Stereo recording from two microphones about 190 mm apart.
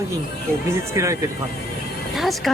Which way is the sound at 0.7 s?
15° right (ahead or behind).